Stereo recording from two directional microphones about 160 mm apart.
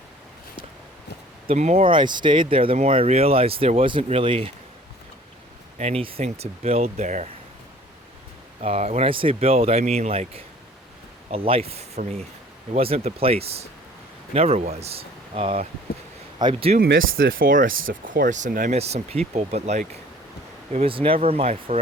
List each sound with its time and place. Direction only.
1.5 s speech: 45° right (ahead or behind)
1.9 s speech: 30° right (ahead or behind)
5.7 s speech: 40° right (ahead or behind)
8.6 s speech: 40° right (ahead or behind)
16.7 s speech: 65° right (ahead or behind); by 21.8 s 40° right (ahead or behind)